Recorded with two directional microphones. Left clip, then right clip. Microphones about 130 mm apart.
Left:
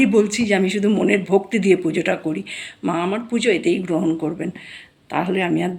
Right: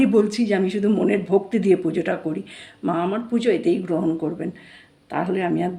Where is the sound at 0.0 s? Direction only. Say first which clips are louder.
Left 2 dB; 15° left (ahead or behind).